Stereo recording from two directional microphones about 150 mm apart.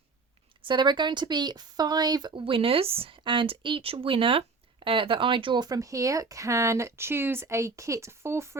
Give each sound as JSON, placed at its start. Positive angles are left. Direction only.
{"t": 0.6, "sound": "speech", "side_deg": -30}